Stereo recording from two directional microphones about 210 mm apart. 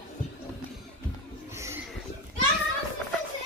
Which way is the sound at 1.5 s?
15° right (ahead or behind).